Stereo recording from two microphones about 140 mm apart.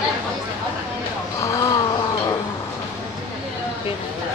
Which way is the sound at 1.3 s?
25° left (ahead or behind).